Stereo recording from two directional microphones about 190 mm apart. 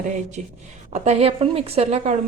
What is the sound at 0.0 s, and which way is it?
A woman's voice, 40° right (ahead or behind).